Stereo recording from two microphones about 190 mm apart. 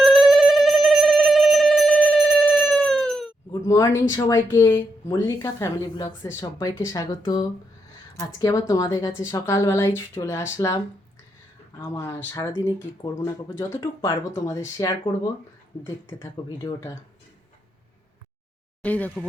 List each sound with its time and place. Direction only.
0.0 s a sound: centre (ahead or behind)
3.5 s a woman's voice: 15° left (ahead or behind)
8.4 s a woman's voice: 15° left (ahead or behind)
11.8 s a woman's voice: 15° left (ahead or behind)
18.8 s a woman's voice: 10° left (ahead or behind)